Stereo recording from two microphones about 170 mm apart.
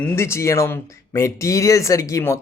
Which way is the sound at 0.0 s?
15° left (ahead or behind).